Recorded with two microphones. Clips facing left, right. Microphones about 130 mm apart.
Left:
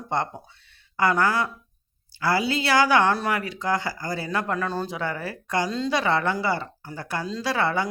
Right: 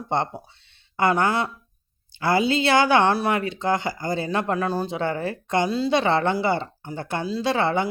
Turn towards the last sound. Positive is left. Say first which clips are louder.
# right 3 dB
turn(degrees=-25)  # may be behind; listen again after turning